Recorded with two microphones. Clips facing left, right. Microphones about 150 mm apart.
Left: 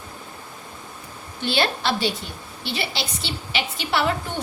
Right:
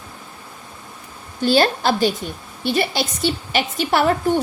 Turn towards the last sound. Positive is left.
turn(degrees=-45)  # may be behind; listen again after turning